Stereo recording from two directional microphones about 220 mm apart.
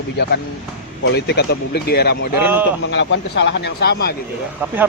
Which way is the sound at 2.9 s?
55° left (ahead or behind).